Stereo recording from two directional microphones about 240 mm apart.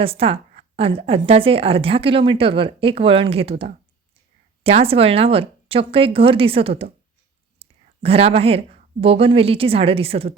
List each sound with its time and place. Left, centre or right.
0.0 s a woman's voice: right